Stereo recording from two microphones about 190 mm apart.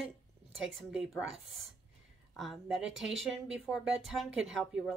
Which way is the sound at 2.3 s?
Centre (ahead or behind).